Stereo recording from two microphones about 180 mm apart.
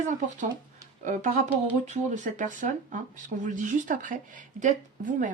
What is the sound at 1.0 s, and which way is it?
Speech, 45° right (ahead or behind).